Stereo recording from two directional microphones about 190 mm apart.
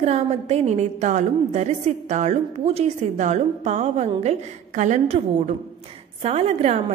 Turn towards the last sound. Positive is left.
turn(degrees=-35)  # may be behind; listen again after turning